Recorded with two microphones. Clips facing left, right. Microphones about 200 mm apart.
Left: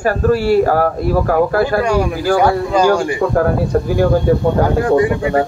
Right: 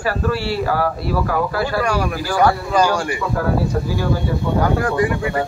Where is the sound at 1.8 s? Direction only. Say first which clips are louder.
Left 5 dB; 20° left (ahead or behind).